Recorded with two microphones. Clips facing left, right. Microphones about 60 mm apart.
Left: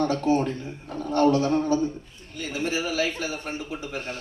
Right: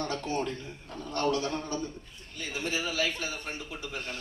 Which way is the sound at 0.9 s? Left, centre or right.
Left.